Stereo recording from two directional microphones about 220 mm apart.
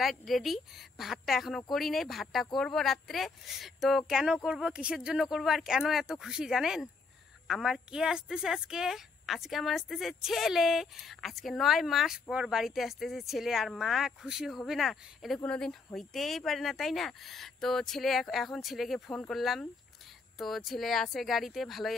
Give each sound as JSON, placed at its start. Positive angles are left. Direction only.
{"t": 0.0, "sound": "speech", "side_deg": 0}